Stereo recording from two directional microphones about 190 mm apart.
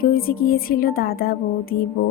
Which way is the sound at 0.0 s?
50° left (ahead or behind).